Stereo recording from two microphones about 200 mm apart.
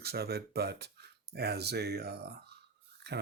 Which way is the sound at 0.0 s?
50° right (ahead or behind).